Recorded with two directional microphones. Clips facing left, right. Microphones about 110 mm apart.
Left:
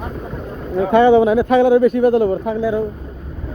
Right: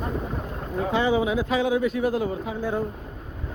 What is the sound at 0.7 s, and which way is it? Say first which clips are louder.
Speech: left 11 dB; 60° left (ahead or behind).